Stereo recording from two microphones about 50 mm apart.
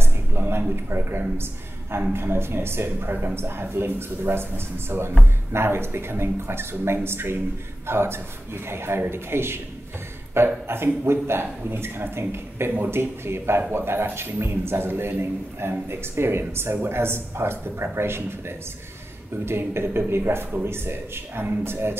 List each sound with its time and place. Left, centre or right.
0.0 s a man's voice: right
13.6 s speech: right
13.8 s speech: right
19.4 s speech: right